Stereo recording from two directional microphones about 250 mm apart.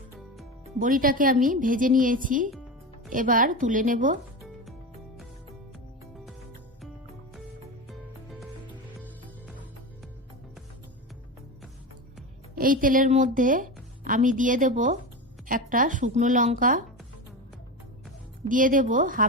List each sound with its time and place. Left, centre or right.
0.8 s a woman's voice: right
12.5 s a woman's voice: right
18.4 s a woman's voice: right